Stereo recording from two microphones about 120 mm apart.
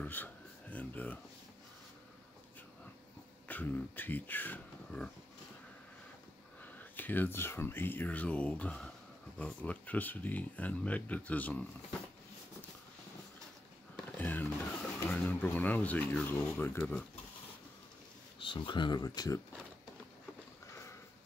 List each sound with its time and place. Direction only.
0.0 s speech: 15° left (ahead or behind)
3.4 s speech: 15° left (ahead or behind)
6.6 s speech: 15° left (ahead or behind)
13.9 s a sound: 15° left (ahead or behind)
15.0 s speech: 15° left (ahead or behind)
16.7 s speech: 5° left (ahead or behind)
18.4 s speech: 45° left (ahead or behind)
20.6 s sniff: 25° left (ahead or behind)